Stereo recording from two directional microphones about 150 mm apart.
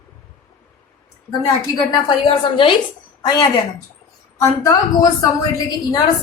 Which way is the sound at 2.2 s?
35° left (ahead or behind).